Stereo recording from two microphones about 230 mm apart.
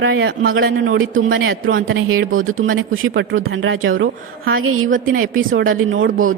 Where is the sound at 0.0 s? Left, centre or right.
Right.